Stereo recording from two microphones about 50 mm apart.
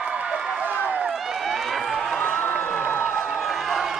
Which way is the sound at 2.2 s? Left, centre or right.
Centre.